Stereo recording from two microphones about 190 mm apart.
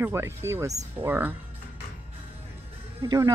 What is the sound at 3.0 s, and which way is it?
Speech, 20° right (ahead or behind).